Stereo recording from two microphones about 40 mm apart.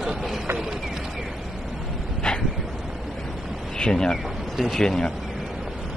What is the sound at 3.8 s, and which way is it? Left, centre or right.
Speech, centre.